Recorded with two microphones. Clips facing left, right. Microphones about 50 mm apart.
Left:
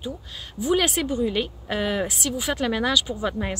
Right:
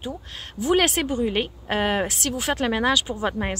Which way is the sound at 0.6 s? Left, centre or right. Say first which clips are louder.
Right 2 dB; right.